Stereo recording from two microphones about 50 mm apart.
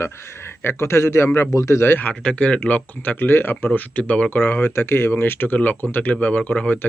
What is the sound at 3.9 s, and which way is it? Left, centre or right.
Speech, left.